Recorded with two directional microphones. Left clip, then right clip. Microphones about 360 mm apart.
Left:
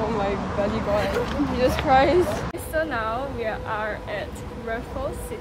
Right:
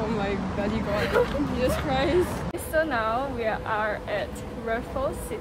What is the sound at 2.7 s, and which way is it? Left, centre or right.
Speech, centre.